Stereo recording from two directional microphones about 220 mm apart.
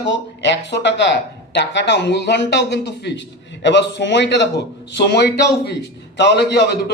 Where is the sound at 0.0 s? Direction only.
55° left (ahead or behind).